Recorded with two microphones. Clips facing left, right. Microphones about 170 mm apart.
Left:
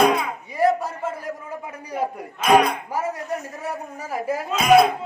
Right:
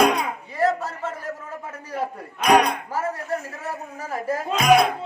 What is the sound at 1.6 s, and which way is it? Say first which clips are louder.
Speech: left 2 dB; 15° left (ahead or behind).